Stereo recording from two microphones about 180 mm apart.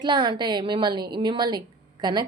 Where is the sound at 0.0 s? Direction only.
25° right (ahead or behind).